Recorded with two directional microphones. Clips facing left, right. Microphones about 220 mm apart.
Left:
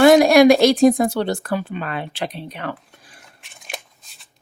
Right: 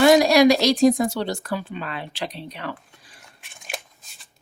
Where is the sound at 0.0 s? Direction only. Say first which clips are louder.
Left 4 dB; 55° left (ahead or behind).